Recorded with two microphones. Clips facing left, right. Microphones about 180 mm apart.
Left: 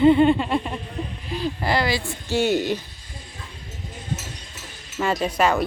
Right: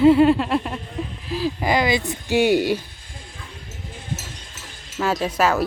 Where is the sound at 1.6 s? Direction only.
15° right (ahead or behind).